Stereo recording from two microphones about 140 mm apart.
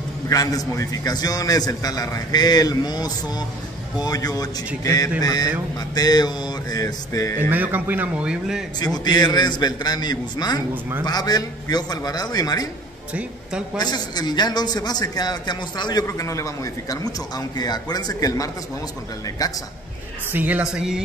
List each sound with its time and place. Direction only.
0.3 s a man's voice: 25° left (ahead or behind)
7.3 s speech: 15° right (ahead or behind)
8.7 s a man's voice: 30° left (ahead or behind)
10.7 s speech: 15° right (ahead or behind)
11.1 s a man's voice: 30° left (ahead or behind)
13.1 s speech: 5° right (ahead or behind)
13.7 s a man's voice: 30° left (ahead or behind)
20.3 s speech: 10° right (ahead or behind)